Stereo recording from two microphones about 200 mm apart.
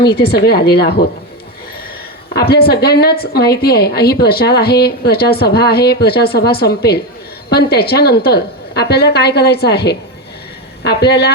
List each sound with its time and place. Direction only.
0.3 s a woman's voice: 55° left (ahead or behind)
2.3 s a woman's voice: 50° left (ahead or behind)